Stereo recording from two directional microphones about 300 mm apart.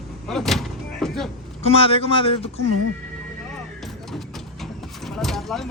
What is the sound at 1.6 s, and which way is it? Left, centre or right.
Speech, centre.